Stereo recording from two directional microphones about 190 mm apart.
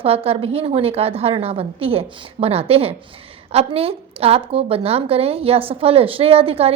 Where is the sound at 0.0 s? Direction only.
30° right (ahead or behind).